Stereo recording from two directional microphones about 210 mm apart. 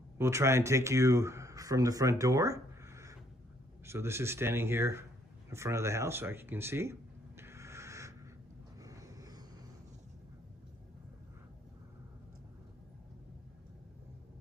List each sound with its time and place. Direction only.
0.2 s speech: 15° right (ahead or behind)
5.5 s a sound: 15° right (ahead or behind)
8.8 s vehicle: 15° right (ahead or behind)